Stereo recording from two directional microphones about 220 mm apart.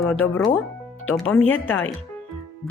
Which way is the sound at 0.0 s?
Centre (ahead or behind).